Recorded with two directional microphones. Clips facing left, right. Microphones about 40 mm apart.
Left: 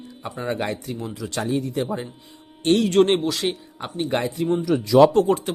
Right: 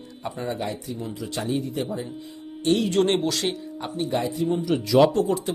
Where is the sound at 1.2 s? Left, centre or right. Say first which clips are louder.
Left 3 dB; left.